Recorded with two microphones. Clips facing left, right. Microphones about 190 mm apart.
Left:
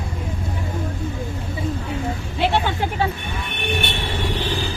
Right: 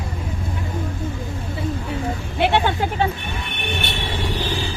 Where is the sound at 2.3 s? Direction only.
60° right (ahead or behind).